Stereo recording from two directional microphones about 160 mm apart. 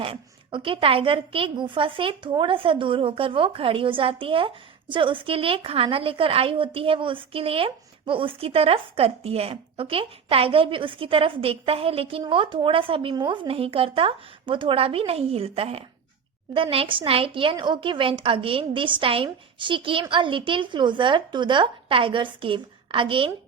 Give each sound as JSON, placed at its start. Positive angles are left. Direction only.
{"t": 0.0, "sound": "a woman's voice", "side_deg": -35}